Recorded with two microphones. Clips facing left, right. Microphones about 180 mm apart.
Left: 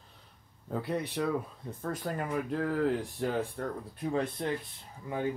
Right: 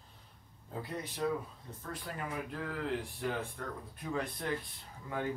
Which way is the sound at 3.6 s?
30° left (ahead or behind).